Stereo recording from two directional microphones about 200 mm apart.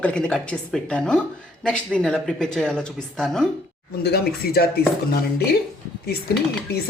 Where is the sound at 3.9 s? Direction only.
50° left (ahead or behind).